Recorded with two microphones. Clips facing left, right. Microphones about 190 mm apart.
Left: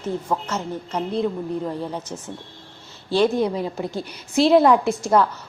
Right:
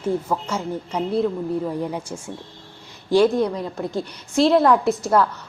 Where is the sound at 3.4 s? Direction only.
5° left (ahead or behind).